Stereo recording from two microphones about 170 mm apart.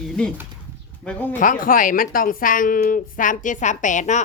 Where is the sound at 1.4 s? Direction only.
55° left (ahead or behind).